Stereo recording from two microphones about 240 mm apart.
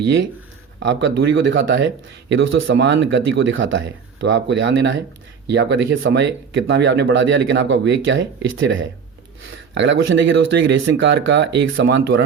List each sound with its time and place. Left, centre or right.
0.8 s speech: right